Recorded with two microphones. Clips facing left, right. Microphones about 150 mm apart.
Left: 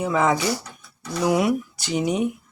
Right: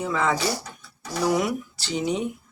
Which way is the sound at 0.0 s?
15° left (ahead or behind).